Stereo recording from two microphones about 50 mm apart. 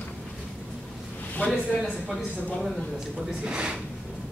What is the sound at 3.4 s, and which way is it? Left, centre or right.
Speech, centre.